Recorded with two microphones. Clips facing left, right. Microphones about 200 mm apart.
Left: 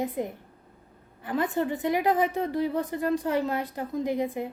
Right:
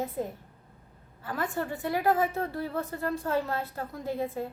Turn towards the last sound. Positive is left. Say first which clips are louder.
# left 4 dB
turn(degrees=15)  # may be behind; listen again after turning